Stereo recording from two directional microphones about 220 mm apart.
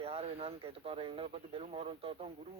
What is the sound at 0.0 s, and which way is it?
Speech, 25° right (ahead or behind).